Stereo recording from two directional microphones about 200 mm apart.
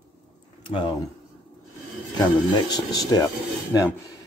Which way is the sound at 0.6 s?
25° left (ahead or behind).